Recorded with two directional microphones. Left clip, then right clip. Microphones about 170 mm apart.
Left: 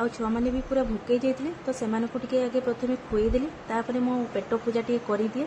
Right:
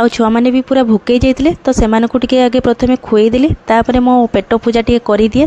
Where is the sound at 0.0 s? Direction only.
60° right (ahead or behind).